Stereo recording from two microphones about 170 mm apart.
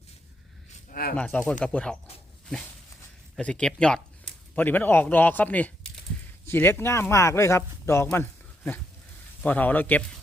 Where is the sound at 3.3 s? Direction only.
5° left (ahead or behind).